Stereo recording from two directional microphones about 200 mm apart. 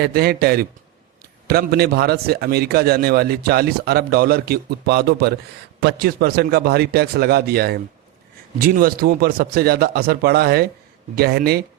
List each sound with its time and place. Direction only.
0.0 s a man's voice: 50° right (ahead or behind)